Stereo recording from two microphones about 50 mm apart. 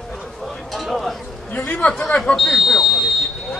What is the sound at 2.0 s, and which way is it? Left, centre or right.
Speech, centre.